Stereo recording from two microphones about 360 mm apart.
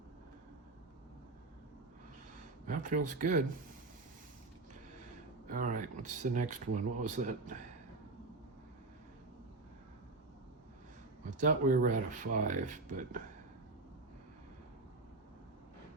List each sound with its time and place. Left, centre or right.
2.6 s speech: right
5.5 s speech: right
11.3 s speech: right